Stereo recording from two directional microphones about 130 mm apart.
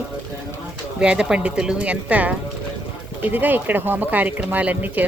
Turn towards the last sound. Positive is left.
turn(degrees=-15)  # may be behind; listen again after turning